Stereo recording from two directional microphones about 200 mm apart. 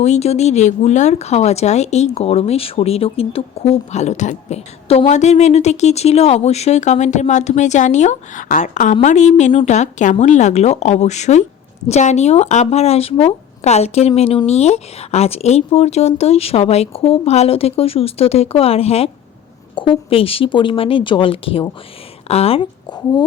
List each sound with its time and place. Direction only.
0.0 s speech: 35° left (ahead or behind)